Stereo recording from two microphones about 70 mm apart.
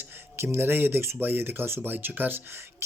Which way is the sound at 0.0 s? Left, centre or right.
Right.